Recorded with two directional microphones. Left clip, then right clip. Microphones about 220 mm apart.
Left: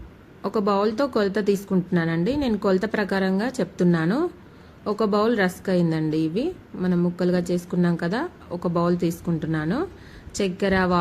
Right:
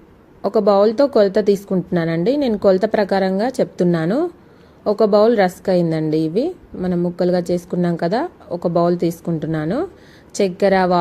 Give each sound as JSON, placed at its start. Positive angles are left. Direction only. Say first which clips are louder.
{"t": 0.4, "sound": "a woman's voice", "louder": "right 8 dB", "side_deg": -15}